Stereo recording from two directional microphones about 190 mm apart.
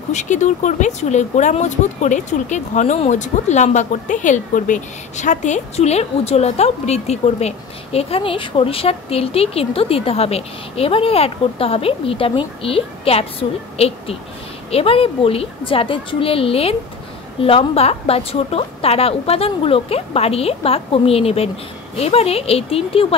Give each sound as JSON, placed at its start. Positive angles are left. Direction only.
{"t": 0.1, "sound": "a woman's voice", "side_deg": 40}